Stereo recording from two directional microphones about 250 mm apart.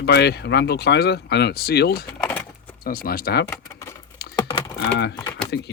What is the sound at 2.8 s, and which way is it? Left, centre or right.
Speech, left.